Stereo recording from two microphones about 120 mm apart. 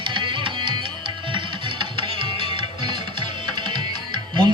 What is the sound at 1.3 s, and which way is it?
Music, 45° right (ahead or behind).